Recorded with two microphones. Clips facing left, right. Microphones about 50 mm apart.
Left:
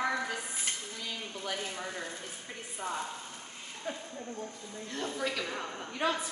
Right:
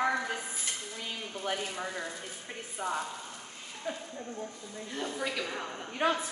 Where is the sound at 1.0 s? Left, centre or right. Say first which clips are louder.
Right 1 dB; right.